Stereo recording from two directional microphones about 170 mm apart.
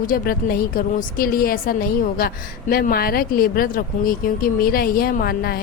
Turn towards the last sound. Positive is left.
turn(degrees=60)  # may be behind; listen again after turning